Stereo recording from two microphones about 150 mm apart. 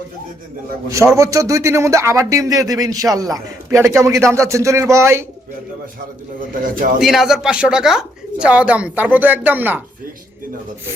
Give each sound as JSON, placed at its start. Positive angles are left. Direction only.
{"t": 0.9, "sound": "speech", "side_deg": -20}
{"t": 6.5, "sound": "speech", "side_deg": -65}
{"t": 7.0, "sound": "speech", "side_deg": -5}